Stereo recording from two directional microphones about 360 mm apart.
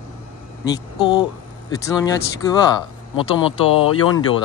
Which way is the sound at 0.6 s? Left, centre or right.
Centre.